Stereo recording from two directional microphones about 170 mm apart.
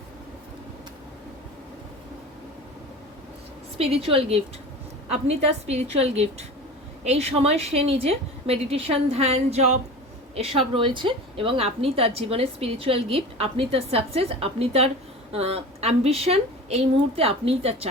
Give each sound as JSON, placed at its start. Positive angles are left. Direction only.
{"t": 3.8, "sound": "a woman's voice", "side_deg": -35}